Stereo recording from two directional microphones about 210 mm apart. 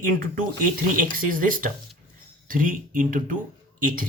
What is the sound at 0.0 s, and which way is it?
Speech, 40° right (ahead or behind).